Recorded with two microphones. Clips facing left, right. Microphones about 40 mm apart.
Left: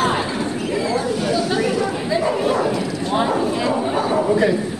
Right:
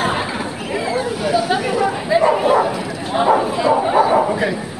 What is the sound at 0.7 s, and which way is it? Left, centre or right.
Chatter, centre.